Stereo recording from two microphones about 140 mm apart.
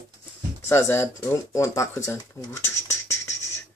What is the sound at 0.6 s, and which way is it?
Speech, 20° left (ahead or behind).